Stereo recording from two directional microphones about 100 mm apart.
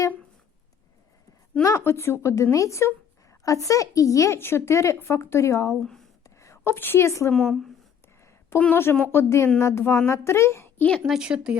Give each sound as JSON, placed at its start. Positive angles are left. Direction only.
{"t": 1.6, "sound": "a woman's voice", "side_deg": 25}
{"t": 6.2, "sound": "a sound", "side_deg": 30}
{"t": 7.3, "sound": "a woman's voice", "side_deg": 5}
{"t": 8.5, "sound": "a woman's voice", "side_deg": 20}
{"t": 10.8, "sound": "speech", "side_deg": 10}
{"t": 11.1, "sound": "speech", "side_deg": -10}